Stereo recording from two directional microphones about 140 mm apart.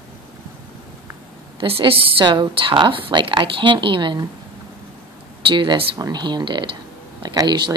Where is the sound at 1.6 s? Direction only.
40° right (ahead or behind).